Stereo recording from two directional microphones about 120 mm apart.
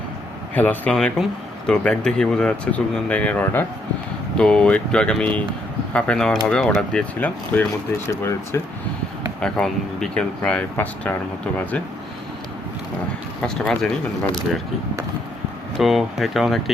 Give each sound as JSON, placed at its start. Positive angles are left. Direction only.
{"t": 0.5, "sound": "speech", "side_deg": 15}
{"t": 8.1, "sound": "speech", "side_deg": 20}
{"t": 9.4, "sound": "speech", "side_deg": 5}
{"t": 13.4, "sound": "speech", "side_deg": 5}
{"t": 15.8, "sound": "speech", "side_deg": 0}